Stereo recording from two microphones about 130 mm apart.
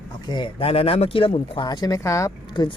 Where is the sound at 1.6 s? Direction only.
30° left (ahead or behind).